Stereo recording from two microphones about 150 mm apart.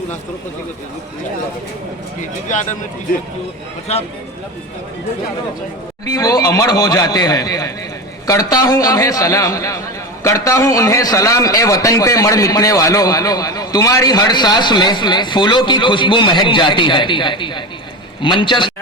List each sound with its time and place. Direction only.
2.5 s speech: 55° left (ahead or behind)
6.1 s a man's voice: 25° left (ahead or behind)